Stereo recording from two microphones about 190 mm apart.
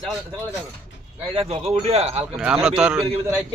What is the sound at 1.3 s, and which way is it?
A man's voice, 30° right (ahead or behind).